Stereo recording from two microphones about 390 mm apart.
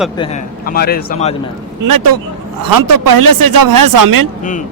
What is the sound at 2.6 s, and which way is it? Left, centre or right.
A man's voice, right.